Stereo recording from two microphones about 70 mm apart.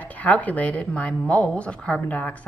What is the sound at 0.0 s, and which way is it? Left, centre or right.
A woman's voice, left.